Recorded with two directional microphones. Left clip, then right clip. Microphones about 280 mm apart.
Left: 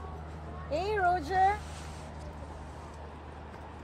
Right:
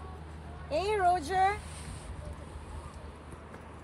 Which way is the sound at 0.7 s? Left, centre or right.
Right.